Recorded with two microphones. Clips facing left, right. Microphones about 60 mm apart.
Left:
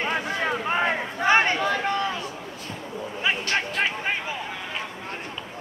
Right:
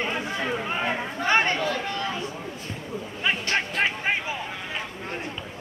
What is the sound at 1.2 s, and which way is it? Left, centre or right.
Chatter, left.